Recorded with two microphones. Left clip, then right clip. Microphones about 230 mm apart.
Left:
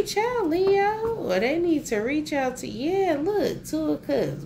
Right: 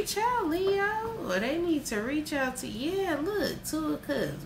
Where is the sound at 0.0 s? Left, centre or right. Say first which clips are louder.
Left 4 dB; right.